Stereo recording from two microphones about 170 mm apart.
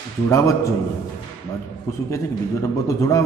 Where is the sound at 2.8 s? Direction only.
20° left (ahead or behind).